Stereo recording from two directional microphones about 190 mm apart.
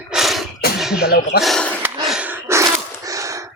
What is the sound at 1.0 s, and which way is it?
Speech, 55° left (ahead or behind).